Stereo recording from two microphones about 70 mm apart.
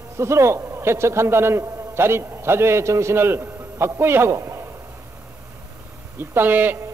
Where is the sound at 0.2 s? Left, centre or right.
Right.